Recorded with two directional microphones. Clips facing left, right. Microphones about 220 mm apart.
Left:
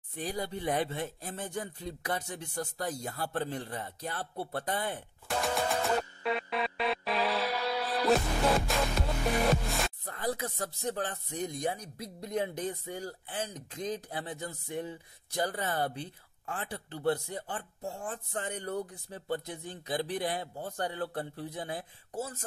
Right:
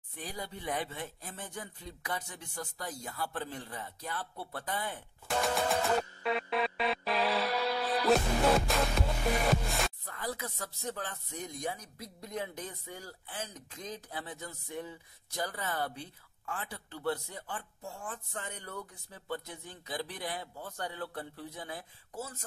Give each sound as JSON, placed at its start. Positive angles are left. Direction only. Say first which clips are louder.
{"t": 0.3, "sound": "speech", "louder": "left 5 dB", "side_deg": 40}
{"t": 5.3, "sound": "music", "louder": "even", "side_deg": 0}
{"t": 10.0, "sound": "speech", "louder": "left 5 dB", "side_deg": 35}
{"t": 15.3, "sound": "speech", "louder": "left 4 dB", "side_deg": 35}